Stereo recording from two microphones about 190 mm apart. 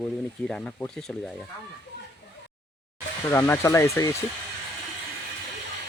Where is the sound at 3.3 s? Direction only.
15° left (ahead or behind).